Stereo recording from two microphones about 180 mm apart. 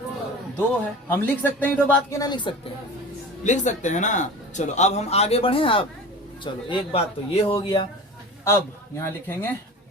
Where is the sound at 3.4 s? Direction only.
40° left (ahead or behind).